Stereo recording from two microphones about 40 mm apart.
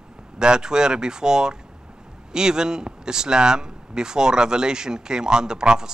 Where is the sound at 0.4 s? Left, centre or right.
Centre.